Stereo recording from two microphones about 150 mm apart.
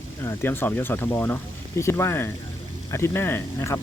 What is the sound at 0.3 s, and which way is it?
Speech, 15° left (ahead or behind).